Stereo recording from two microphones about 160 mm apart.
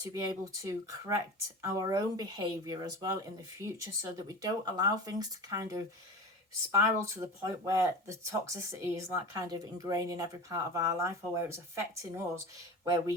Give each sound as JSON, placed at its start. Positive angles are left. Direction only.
{"t": 0.0, "sound": "speech", "side_deg": -20}